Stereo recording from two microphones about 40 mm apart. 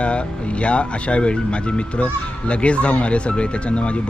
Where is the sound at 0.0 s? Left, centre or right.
Left.